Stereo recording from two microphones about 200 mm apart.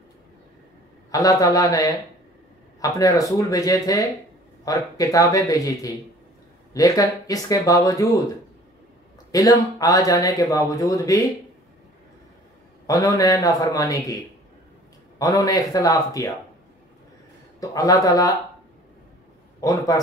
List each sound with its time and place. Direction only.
1.1 s speech: 15° left (ahead or behind)
9.3 s speech: 15° left (ahead or behind)
12.8 s speech: 15° left (ahead or behind)
17.6 s speech: 15° left (ahead or behind)
19.6 s speech: 15° left (ahead or behind)